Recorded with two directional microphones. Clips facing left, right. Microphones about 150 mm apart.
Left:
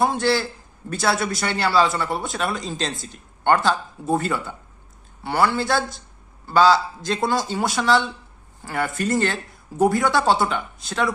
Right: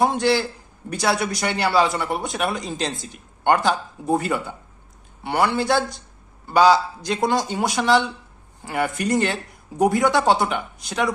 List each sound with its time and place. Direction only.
0.0 s a man's voice: 20° right (ahead or behind)